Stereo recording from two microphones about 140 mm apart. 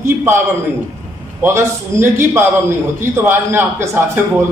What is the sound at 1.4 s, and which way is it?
A man's voice, 15° right (ahead or behind).